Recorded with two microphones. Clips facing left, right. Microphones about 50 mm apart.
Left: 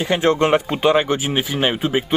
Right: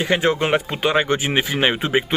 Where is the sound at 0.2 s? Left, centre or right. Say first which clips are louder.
Left 3 dB; centre.